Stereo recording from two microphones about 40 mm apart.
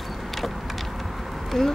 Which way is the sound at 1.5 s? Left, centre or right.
Centre.